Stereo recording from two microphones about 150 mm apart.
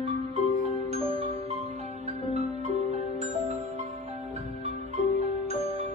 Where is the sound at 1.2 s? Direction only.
45° right (ahead or behind).